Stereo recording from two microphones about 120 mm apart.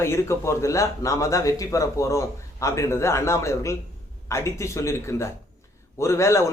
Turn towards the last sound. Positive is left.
turn(degrees=25)  # may be behind; listen again after turning